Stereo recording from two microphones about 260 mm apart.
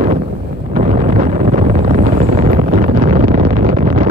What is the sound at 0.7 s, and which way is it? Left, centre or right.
Vehicle, right.